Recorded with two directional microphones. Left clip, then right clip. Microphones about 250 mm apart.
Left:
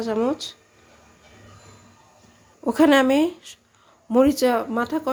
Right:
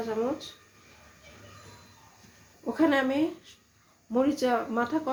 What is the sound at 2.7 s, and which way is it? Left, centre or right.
Speech, left.